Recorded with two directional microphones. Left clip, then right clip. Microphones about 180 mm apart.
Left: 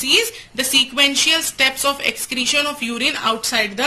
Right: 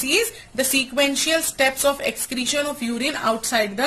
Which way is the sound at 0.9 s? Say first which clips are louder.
Left 4 dB; 50° right (ahead or behind).